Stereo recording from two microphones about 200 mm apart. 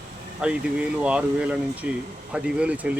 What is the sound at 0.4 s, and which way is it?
Speech, 5° right (ahead or behind).